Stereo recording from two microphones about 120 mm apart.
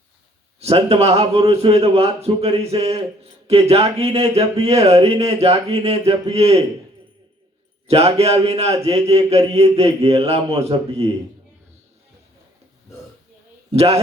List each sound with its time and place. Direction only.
0.6 s speech: 60° right (ahead or behind)
7.9 s speech: 55° right (ahead or behind)
13.7 s a man's voice: 60° right (ahead or behind)